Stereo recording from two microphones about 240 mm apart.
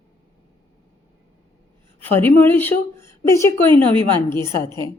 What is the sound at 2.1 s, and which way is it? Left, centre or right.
Speech, centre.